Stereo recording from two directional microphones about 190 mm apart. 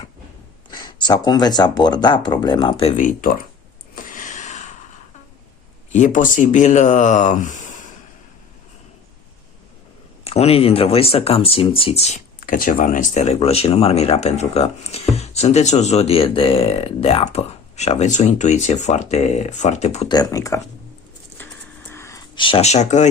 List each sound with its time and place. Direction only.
0.7 s speech: 20° left (ahead or behind)
2.9 s speech: 45° left (ahead or behind)
3.9 s a sound: 45° left (ahead or behind)
5.9 s speech: 40° left (ahead or behind)
10.2 s speech: 30° left (ahead or behind)
20.1 s speech: 20° left (ahead or behind)
21.8 s whispering: 15° left (ahead or behind)
22.4 s speech: 30° left (ahead or behind)